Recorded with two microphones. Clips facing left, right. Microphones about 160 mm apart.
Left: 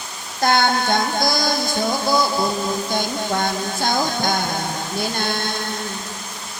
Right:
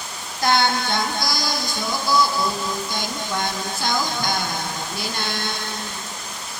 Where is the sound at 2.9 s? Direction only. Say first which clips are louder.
Left 5 dB; 50° left (ahead or behind).